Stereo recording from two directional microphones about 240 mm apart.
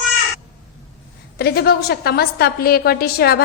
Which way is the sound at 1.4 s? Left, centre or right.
Left.